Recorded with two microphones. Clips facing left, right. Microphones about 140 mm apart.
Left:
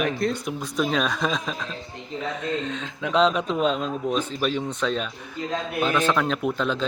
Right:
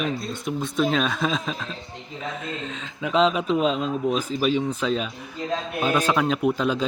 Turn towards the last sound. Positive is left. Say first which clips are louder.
# right 2 dB
turn(degrees=-5)  # may be behind; listen again after turning